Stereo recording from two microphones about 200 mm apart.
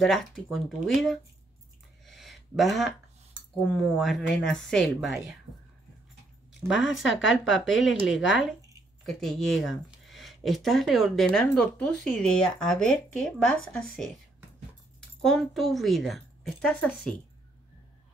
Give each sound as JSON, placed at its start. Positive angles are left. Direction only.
{"t": 0.0, "sound": "speech", "side_deg": 0}
{"t": 2.0, "sound": "a sound", "side_deg": 0}
{"t": 3.7, "sound": "speech", "side_deg": 0}
{"t": 6.7, "sound": "speech", "side_deg": 0}
{"t": 7.1, "sound": "speech", "side_deg": 75}
{"t": 7.5, "sound": "speech", "side_deg": 0}
{"t": 15.2, "sound": "speech", "side_deg": 0}